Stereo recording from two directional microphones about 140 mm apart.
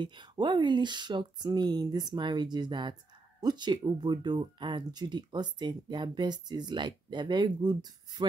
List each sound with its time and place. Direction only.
0.0 s speech: 35° right (ahead or behind)